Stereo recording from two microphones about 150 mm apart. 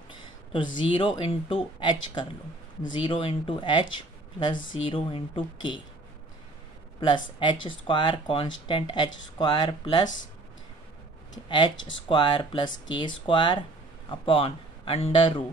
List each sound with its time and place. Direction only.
0.5 s speech: 30° left (ahead or behind)
7.3 s speech: 35° left (ahead or behind)
11.3 s speech: 30° left (ahead or behind)